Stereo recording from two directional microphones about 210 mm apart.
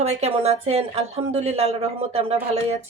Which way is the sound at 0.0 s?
30° right (ahead or behind).